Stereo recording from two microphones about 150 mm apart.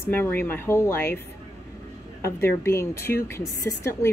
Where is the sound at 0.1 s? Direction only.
15° left (ahead or behind).